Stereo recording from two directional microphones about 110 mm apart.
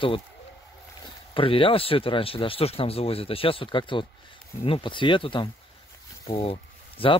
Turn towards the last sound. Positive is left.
turn(degrees=60)  # may be behind; listen again after turning